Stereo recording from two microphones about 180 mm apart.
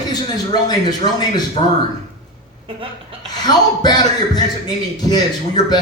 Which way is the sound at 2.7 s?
30° right (ahead or behind).